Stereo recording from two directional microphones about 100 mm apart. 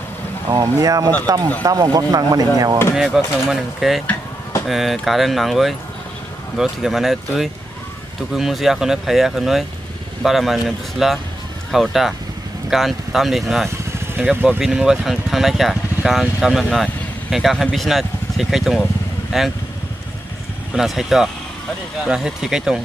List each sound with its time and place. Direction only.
0.5 s speech: 35° right (ahead or behind)
2.9 s speech: centre (ahead or behind)
14.3 s speech: 20° right (ahead or behind)
14.6 s speech: 5° right (ahead or behind)
20.7 s speech: 5° right (ahead or behind)